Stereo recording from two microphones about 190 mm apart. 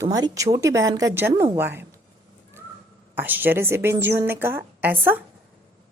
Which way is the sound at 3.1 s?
10° right (ahead or behind).